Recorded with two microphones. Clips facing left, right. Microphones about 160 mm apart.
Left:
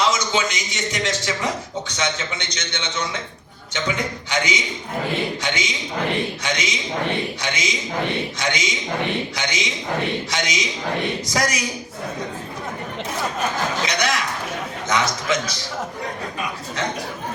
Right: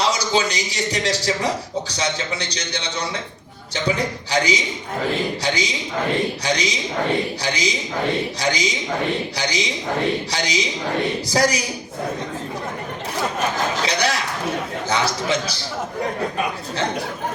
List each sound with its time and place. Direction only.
0.0 s a man's voice: 35° right (ahead or behind)
13.8 s a man's voice: 30° right (ahead or behind)